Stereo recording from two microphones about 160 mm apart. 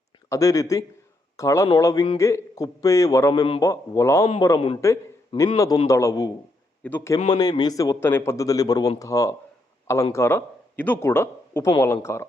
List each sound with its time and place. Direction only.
0.3 s a man's voice: 20° left (ahead or behind)
7.3 s a man's voice: 25° left (ahead or behind)